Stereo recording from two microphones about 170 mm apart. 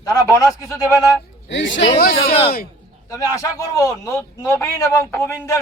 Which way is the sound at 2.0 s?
60° left (ahead or behind).